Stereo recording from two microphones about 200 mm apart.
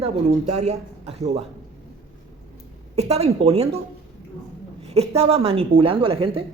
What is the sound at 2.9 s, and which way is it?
Speech, 30° right (ahead or behind).